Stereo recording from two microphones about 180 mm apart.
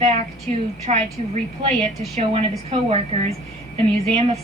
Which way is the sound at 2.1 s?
35° right (ahead or behind).